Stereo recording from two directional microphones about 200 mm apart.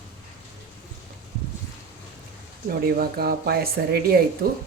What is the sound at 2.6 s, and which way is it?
Speech, 50° right (ahead or behind).